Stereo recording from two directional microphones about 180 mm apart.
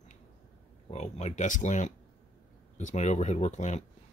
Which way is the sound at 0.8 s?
35° left (ahead or behind).